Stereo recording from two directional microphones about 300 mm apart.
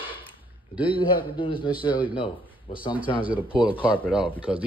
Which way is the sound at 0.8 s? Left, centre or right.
Centre.